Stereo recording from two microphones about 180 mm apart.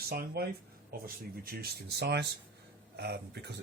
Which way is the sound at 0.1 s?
60° right (ahead or behind).